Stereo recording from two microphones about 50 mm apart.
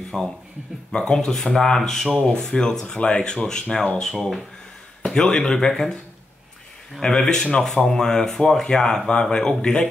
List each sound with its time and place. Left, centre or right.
0.1 s speech: centre
4.1 s speech: centre
7.0 s speech: centre